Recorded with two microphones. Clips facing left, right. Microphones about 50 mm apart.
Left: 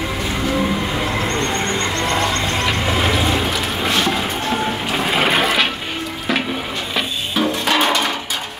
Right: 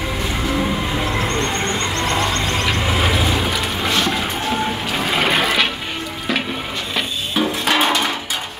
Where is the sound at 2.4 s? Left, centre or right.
Centre.